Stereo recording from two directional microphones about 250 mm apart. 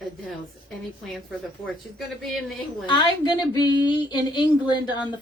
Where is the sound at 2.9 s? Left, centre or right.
Centre.